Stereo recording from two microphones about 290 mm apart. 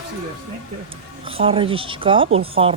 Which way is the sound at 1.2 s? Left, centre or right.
Centre.